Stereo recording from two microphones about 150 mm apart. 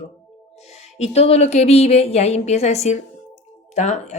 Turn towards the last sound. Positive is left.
turn(degrees=50)  # may be behind; listen again after turning